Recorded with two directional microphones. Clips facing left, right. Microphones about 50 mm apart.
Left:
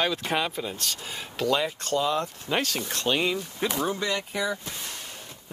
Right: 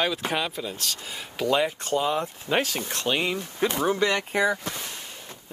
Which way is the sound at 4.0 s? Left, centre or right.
Right.